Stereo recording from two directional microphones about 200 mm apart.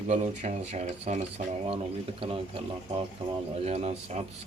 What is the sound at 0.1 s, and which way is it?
Speech, 35° right (ahead or behind).